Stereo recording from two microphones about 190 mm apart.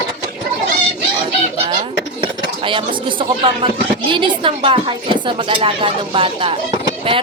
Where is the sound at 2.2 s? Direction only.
25° right (ahead or behind).